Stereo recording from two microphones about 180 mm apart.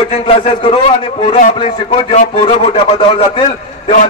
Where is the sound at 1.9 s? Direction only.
40° left (ahead or behind).